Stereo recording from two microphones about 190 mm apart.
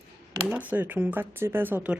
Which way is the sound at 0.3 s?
10° right (ahead or behind).